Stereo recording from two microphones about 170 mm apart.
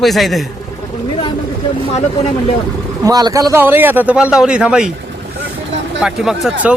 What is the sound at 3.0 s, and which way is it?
Speech, 20° right (ahead or behind).